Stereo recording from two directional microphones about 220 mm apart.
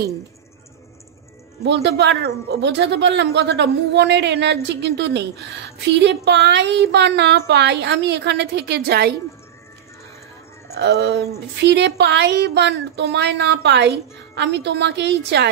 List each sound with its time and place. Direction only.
1.6 s speech: 50° right (ahead or behind)
10.7 s speech: 45° right (ahead or behind)